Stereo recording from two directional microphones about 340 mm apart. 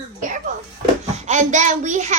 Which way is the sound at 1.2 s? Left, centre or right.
Right.